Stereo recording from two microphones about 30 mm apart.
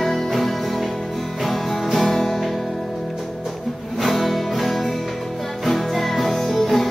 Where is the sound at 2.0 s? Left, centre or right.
Centre.